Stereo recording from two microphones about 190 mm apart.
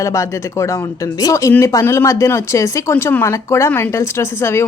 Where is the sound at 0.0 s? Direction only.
15° left (ahead or behind).